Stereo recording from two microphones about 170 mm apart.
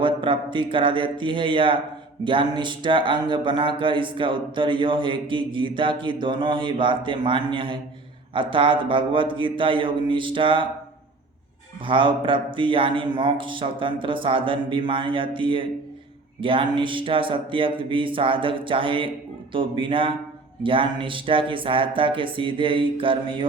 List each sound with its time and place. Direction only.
0.0 s speech: 30° right (ahead or behind)
11.9 s speech: 30° right (ahead or behind)
16.4 s a sound: 30° right (ahead or behind)